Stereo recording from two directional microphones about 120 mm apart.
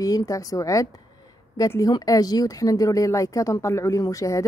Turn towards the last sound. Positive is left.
turn(degrees=25)  # may be behind; listen again after turning